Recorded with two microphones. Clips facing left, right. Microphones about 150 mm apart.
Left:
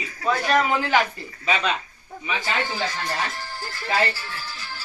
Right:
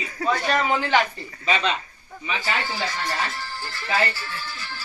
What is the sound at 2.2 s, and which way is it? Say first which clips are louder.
Speech: left 1 dB; 15° left (ahead or behind).